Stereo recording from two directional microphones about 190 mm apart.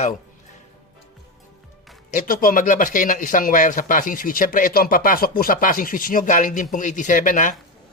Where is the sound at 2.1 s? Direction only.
45° left (ahead or behind).